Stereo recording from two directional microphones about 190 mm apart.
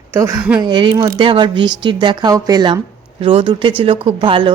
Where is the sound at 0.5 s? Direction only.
25° right (ahead or behind).